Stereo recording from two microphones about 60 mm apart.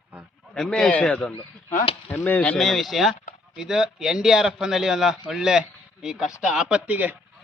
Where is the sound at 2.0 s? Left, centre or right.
Left.